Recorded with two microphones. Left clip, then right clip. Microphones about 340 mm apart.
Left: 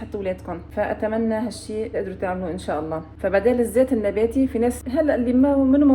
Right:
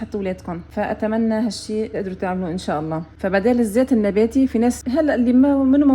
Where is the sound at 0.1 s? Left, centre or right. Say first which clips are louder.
Even; right.